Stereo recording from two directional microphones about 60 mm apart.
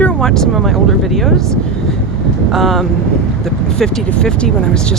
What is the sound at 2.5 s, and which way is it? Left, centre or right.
Speech, centre.